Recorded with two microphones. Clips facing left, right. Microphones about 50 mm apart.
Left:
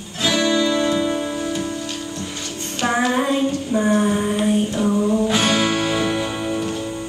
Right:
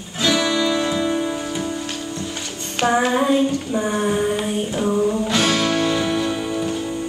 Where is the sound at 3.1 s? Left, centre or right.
Centre.